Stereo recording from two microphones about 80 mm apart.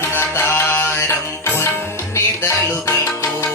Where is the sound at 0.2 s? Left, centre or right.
Left.